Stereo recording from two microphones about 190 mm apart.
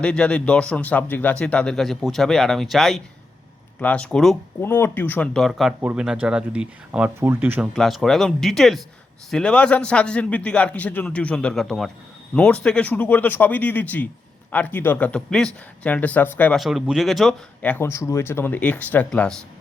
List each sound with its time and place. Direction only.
0.0 s speech: 5° left (ahead or behind)